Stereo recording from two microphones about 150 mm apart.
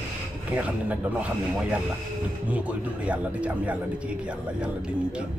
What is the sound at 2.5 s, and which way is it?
Speech, 10° right (ahead or behind).